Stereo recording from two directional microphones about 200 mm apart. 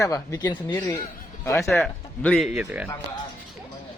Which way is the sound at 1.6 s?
Centre (ahead or behind).